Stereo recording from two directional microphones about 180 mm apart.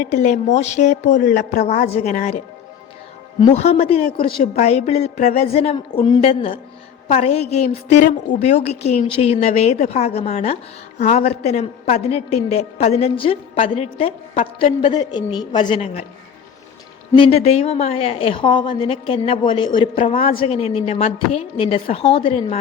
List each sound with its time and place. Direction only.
0.0 s a woman's voice: 40° left (ahead or behind)
3.5 s a woman's voice: 35° left (ahead or behind)
17.2 s a woman's voice: 35° left (ahead or behind)